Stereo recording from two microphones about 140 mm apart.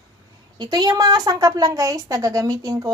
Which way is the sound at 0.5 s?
30° right (ahead or behind).